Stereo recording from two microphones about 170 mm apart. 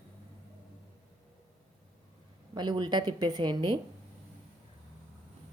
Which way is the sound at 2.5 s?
25° right (ahead or behind).